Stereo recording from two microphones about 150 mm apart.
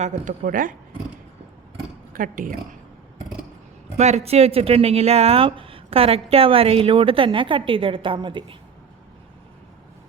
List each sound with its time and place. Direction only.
0.0 s speech: 55° right (ahead or behind)
2.1 s speech: 65° right (ahead or behind)
3.9 s speech: 45° right (ahead or behind); by 8.5 s 30° right (ahead or behind)